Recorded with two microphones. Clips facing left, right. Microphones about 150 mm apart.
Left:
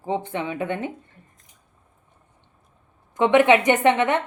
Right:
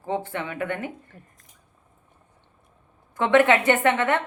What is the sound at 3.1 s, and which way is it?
A woman's voice, 20° left (ahead or behind).